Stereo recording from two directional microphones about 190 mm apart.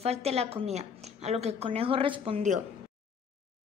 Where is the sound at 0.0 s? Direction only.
35° right (ahead or behind).